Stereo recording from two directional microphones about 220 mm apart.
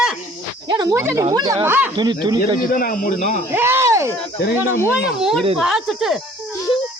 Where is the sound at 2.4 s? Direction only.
40° left (ahead or behind).